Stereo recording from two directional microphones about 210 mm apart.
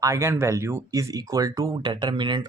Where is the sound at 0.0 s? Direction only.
15° right (ahead or behind).